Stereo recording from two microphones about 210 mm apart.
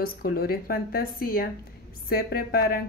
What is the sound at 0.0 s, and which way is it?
Speech, 45° left (ahead or behind).